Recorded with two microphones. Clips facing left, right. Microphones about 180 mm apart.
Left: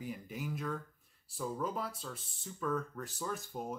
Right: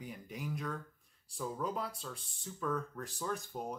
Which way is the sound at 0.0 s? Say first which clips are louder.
Left 2 dB; centre (ahead or behind).